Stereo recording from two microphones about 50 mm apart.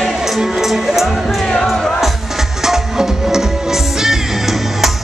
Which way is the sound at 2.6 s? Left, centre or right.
Centre.